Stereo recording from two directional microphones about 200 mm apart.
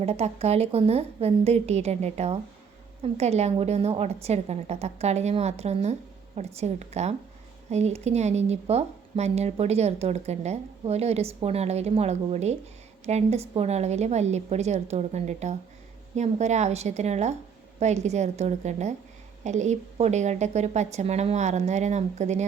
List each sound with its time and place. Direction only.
0.0 s speech: 30° right (ahead or behind)